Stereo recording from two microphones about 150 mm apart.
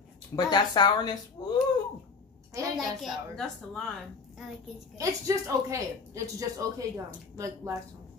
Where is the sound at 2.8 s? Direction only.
Centre (ahead or behind).